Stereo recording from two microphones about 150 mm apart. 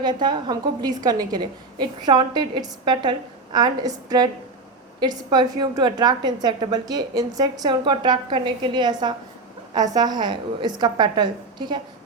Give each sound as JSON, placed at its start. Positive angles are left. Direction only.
{"t": 0.0, "sound": "a woman's voice", "side_deg": -30}